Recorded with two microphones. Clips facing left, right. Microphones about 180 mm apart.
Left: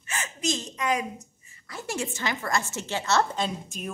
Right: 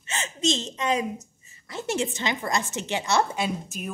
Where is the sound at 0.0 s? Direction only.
25° right (ahead or behind).